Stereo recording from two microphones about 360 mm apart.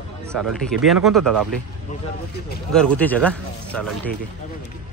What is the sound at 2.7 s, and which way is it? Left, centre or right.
Speech, centre.